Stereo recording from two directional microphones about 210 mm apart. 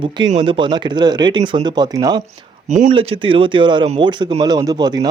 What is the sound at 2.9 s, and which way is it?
Speech, 25° right (ahead or behind).